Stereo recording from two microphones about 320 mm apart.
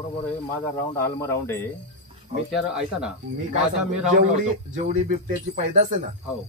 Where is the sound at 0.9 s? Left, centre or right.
Centre.